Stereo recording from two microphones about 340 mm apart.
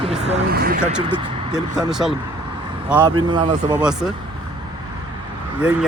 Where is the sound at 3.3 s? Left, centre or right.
Centre.